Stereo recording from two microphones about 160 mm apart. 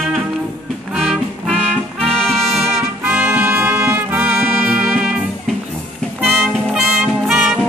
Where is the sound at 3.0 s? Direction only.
10° right (ahead or behind).